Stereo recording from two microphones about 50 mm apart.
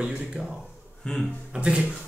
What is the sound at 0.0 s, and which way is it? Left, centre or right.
Speech, centre.